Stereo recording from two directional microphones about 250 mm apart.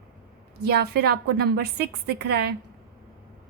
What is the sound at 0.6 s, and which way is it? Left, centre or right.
A woman's voice, right.